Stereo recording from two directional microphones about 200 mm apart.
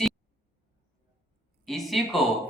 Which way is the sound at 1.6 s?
Centre (ahead or behind).